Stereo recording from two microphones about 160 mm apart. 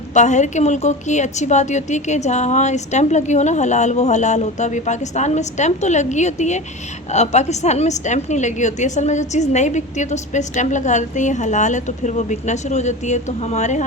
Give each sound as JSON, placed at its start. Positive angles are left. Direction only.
{"t": 0.1, "sound": "a woman's voice", "side_deg": 50}